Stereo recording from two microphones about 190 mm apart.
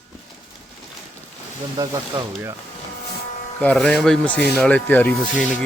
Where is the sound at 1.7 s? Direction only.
20° right (ahead or behind).